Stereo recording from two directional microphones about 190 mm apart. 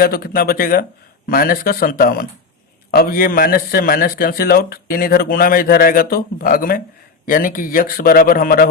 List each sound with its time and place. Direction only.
0.0 s a man's voice: 50° left (ahead or behind)